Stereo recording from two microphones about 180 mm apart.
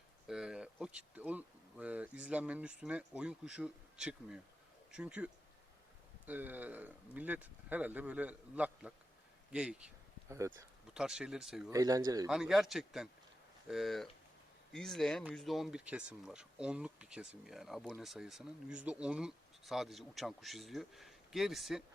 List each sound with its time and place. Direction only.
0.3 s speech: 5° right (ahead or behind)
9.5 s a sound: 5° right (ahead or behind)
10.3 s speech: 15° right (ahead or behind)
10.9 s speech: 5° right (ahead or behind)
11.7 s speech: 20° right (ahead or behind)
12.3 s speech: centre (ahead or behind)